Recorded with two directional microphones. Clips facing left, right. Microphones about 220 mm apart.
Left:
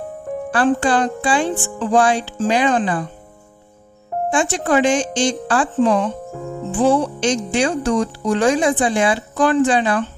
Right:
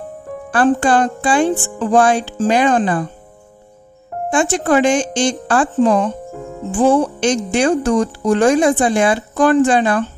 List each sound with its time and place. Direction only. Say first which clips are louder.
0.5 s speech: right 3 dB; 50° right (ahead or behind)
4.3 s speech: right 3 dB; 55° right (ahead or behind)